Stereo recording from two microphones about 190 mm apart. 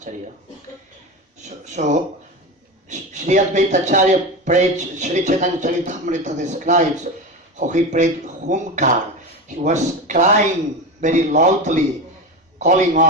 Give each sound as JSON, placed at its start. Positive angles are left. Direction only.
{"t": 1.5, "sound": "a man's voice", "side_deg": -40}